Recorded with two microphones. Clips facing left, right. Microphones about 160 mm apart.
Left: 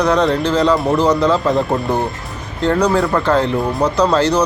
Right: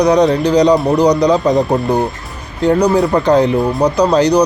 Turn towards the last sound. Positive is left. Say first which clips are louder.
# right 3 dB
turn(degrees=-15)  # may be behind; listen again after turning